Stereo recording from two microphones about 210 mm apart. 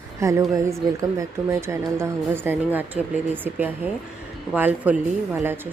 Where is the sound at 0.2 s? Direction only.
15° right (ahead or behind).